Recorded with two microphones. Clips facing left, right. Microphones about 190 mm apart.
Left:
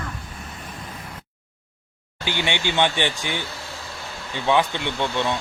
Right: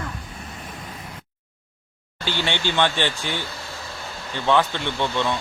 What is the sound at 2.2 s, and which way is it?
A woman's voice, 15° left (ahead or behind).